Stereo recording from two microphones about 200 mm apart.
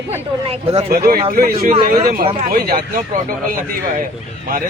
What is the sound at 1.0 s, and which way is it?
Speech, 45° right (ahead or behind).